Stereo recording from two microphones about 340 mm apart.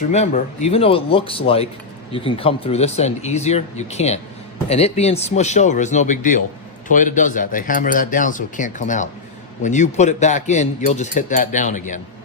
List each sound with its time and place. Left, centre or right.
0.1 s a man's voice: centre